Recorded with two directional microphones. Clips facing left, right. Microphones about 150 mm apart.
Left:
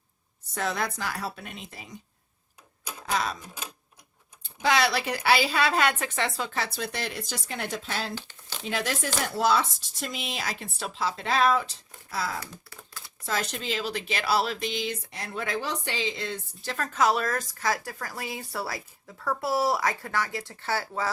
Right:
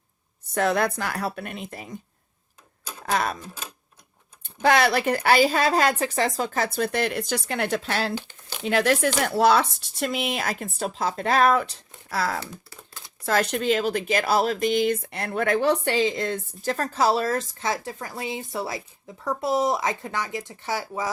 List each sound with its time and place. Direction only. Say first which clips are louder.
0.5 s speech: right 7 dB; 60° right (ahead or behind)
3.1 s speech: right 4 dB; 55° right (ahead or behind)
4.6 s a woman's voice: right 5 dB; 55° right (ahead or behind); by 21.1 s 15° right (ahead or behind)